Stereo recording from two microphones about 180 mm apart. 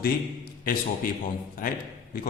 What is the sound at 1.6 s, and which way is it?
Speech, 50° left (ahead or behind).